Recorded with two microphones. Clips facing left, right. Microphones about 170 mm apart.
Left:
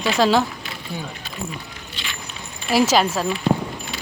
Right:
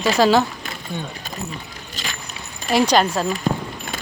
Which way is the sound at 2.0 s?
40° right (ahead or behind).